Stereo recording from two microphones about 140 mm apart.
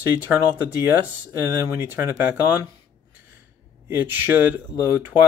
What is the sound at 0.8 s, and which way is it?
Speech, 15° right (ahead or behind).